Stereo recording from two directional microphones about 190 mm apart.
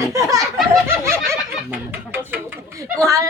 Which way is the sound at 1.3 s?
10° right (ahead or behind).